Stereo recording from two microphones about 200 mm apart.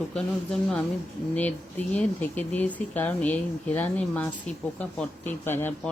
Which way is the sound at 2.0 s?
10° left (ahead or behind).